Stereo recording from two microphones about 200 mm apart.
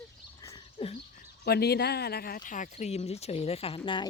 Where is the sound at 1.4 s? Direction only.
55° left (ahead or behind); by 3.8 s 30° left (ahead or behind).